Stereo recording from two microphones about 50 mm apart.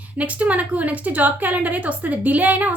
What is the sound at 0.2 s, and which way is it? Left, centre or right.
A woman's voice, right.